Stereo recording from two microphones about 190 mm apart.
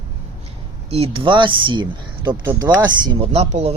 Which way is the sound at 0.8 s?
30° right (ahead or behind).